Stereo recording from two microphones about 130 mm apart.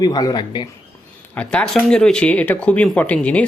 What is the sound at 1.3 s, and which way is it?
Speech, 10° left (ahead or behind).